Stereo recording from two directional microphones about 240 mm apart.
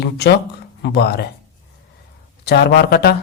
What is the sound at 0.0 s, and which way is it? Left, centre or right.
Speech, left.